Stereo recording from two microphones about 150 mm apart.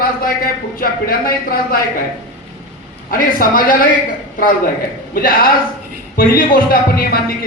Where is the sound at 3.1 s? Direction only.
70° left (ahead or behind).